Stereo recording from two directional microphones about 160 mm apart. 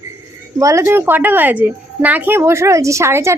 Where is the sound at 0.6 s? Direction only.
15° right (ahead or behind).